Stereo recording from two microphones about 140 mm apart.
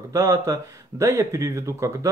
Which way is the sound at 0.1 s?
25° right (ahead or behind).